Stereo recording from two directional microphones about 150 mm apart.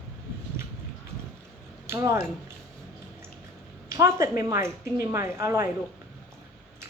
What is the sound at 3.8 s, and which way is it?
A woman's voice, 20° right (ahead or behind).